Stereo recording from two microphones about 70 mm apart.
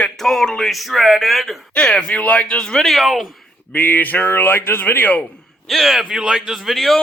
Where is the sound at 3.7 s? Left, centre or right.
Left.